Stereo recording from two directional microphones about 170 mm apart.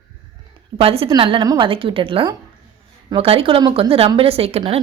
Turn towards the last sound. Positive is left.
turn(degrees=-35)  # may be behind; listen again after turning